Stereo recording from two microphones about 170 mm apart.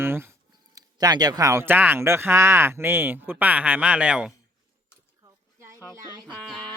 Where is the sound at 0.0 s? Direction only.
15° right (ahead or behind).